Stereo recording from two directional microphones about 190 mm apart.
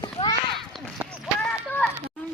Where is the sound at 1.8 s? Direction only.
5° left (ahead or behind).